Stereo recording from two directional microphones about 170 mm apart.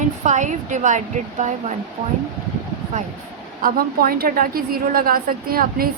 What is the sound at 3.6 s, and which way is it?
A woman's voice, 55° right (ahead or behind).